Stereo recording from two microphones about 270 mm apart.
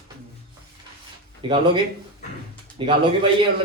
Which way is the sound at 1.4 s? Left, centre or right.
Centre.